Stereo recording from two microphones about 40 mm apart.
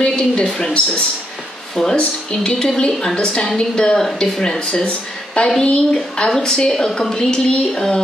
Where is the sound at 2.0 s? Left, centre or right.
Centre.